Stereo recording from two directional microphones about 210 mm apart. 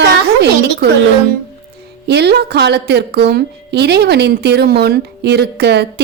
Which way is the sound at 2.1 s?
50° right (ahead or behind).